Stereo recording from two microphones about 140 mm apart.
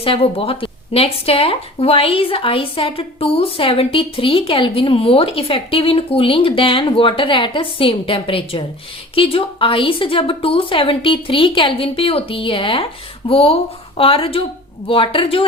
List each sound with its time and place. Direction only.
0.0 s speech: 40° left (ahead or behind)